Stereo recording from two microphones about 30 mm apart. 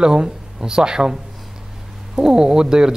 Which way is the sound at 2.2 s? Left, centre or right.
Right.